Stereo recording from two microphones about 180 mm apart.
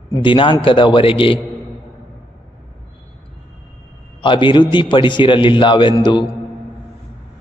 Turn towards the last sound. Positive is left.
turn(degrees=25)  # may be behind; listen again after turning